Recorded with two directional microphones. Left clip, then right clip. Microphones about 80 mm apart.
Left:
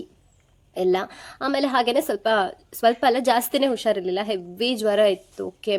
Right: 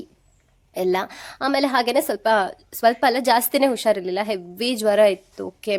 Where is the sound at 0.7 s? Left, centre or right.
Right.